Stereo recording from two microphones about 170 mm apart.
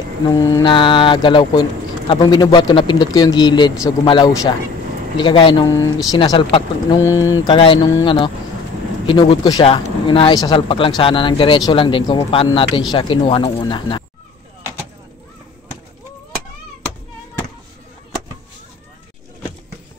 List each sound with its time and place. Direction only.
0.3 s speech: 20° left (ahead or behind)
7.5 s speech: 30° left (ahead or behind)